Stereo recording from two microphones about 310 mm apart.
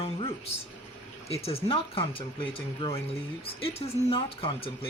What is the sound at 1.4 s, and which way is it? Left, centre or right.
Speech, centre.